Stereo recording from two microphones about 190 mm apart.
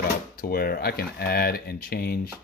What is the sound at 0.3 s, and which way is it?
Speech, 55° left (ahead or behind).